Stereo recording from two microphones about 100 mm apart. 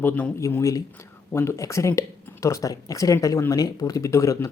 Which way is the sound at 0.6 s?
35° left (ahead or behind).